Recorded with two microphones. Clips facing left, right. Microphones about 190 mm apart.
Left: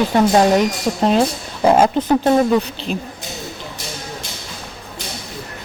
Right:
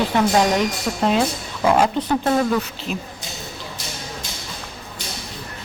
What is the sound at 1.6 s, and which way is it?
Speech, 45° left (ahead or behind).